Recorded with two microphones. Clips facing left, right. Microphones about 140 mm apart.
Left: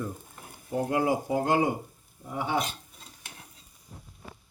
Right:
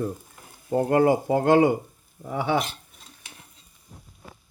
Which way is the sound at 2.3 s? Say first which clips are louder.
Right 5 dB; 85° right.